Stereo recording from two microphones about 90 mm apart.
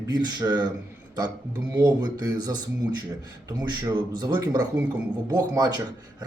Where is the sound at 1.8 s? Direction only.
50° right (ahead or behind).